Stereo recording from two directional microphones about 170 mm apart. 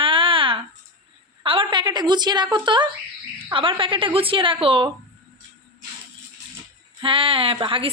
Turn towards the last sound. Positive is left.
turn(degrees=-30)  # may be behind; listen again after turning